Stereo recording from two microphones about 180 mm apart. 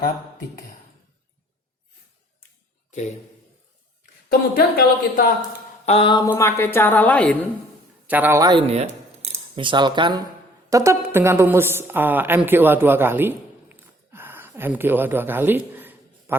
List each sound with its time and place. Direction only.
4.5 s speech: 55° left (ahead or behind)
5.8 s mantra: 30° left (ahead or behind)
6.3 s a woman's voice: 10° left (ahead or behind)
8.0 s a man's voice: 10° right (ahead or behind)
8.7 s a woman's voice: 35° right (ahead or behind); by 16.4 s 10° right (ahead or behind)